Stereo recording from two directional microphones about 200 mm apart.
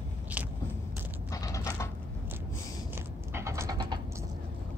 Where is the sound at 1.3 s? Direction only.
15° left (ahead or behind).